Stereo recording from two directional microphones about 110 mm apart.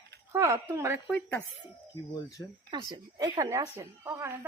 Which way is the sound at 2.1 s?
30° left (ahead or behind).